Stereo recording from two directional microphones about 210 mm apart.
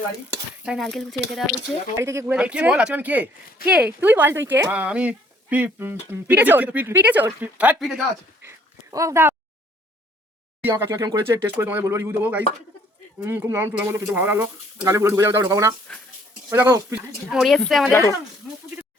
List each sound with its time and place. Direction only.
0.6 s speech: centre (ahead or behind)
2.0 s speech: 10° right (ahead or behind)
8.4 s a sound: 15° right (ahead or behind)
10.6 s speech: 10° right (ahead or behind)
17.3 s speech: centre (ahead or behind)